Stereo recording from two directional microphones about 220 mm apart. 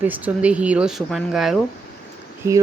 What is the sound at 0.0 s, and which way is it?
A woman's voice, 5° right (ahead or behind).